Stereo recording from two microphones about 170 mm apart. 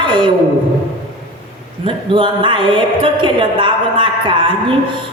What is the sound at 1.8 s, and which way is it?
A woman's voice, 30° right (ahead or behind).